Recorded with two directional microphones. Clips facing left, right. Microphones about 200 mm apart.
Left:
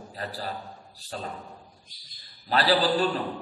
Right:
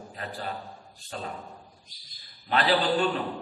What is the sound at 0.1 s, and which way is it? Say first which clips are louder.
Speech: left 2 dB; 35° left (ahead or behind).